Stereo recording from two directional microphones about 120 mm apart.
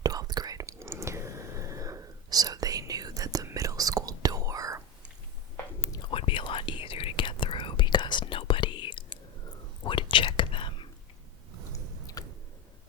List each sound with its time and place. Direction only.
0.0 s whispering: 35° right (ahead or behind)
6.0 s whispering: 50° left (ahead or behind)
12.2 s a sound: 30° left (ahead or behind)